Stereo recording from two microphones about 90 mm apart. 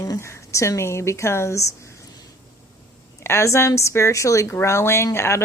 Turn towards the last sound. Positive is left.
turn(degrees=30)  # may be behind; listen again after turning